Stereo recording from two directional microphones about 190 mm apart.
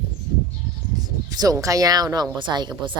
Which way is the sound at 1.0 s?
20° right (ahead or behind).